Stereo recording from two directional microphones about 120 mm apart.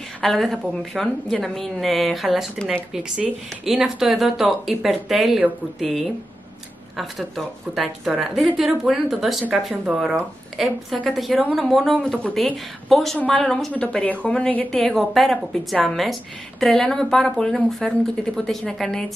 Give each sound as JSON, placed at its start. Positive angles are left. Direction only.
{"t": 0.2, "sound": "a woman's voice", "side_deg": 5}